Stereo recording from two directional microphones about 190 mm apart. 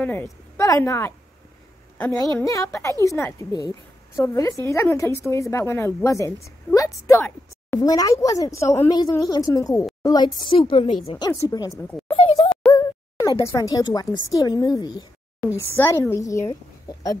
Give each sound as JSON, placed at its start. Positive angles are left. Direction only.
{"t": 0.0, "sound": "a woman's voice", "side_deg": 10}
{"t": 12.1, "sound": "a woman's voice", "side_deg": 30}